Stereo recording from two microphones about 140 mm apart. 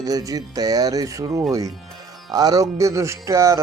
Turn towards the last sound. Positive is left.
turn(degrees=-20)  # may be behind; listen again after turning